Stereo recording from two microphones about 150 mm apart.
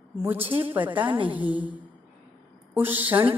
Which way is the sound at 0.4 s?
35° right (ahead or behind).